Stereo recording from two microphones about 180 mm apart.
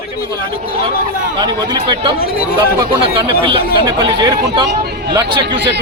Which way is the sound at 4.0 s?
25° right (ahead or behind).